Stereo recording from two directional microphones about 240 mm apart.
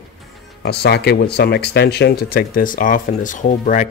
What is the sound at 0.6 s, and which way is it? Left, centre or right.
Speech, left.